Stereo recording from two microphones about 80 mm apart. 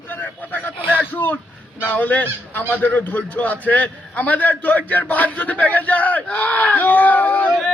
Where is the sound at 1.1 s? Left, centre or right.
Left.